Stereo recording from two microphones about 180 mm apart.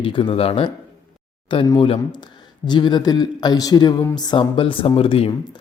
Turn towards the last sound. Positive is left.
turn(degrees=30)  # may be behind; listen again after turning